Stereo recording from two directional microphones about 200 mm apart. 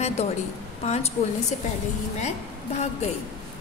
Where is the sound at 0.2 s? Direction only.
30° left (ahead or behind).